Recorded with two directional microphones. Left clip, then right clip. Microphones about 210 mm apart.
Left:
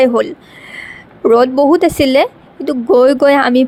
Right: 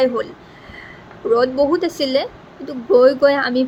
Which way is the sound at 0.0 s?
40° left (ahead or behind).